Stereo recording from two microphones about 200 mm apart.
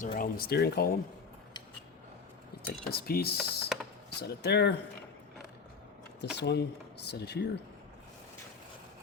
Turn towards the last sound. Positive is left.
turn(degrees=55)  # may be behind; listen again after turning